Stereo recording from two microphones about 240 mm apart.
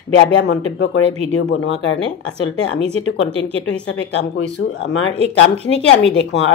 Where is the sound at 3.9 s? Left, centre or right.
Left.